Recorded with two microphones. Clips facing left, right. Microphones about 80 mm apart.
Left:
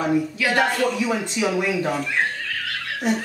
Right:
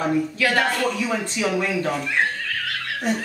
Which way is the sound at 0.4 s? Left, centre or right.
Centre.